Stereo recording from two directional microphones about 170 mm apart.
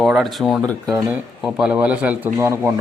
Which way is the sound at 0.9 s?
15° right (ahead or behind).